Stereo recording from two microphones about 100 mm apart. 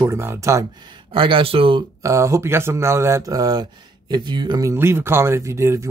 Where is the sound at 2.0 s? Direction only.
30° right (ahead or behind); by 4.6 s 50° right (ahead or behind).